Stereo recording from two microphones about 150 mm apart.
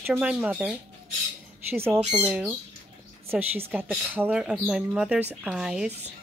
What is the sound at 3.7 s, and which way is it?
Speech, 10° right (ahead or behind).